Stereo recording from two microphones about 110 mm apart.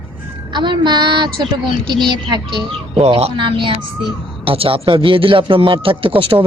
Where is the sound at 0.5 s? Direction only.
45° right (ahead or behind).